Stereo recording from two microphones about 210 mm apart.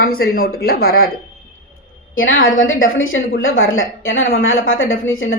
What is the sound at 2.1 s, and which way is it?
Speech, 70° left (ahead or behind).